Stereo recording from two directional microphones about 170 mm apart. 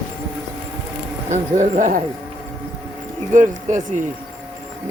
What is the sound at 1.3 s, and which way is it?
Speech, 45° right (ahead or behind).